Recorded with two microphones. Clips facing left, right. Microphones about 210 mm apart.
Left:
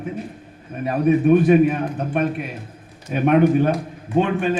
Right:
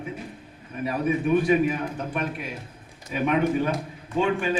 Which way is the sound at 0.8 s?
55° left (ahead or behind).